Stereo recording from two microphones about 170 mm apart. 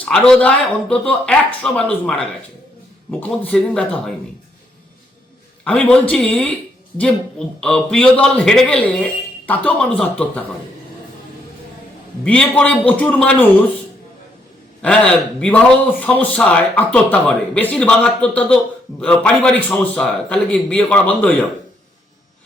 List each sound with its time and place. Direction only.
0.0 s a man's voice: 5° left (ahead or behind)
5.6 s a man's voice: 5° left (ahead or behind)
12.2 s a man's voice: 5° left (ahead or behind)
14.8 s a man's voice: 5° left (ahead or behind)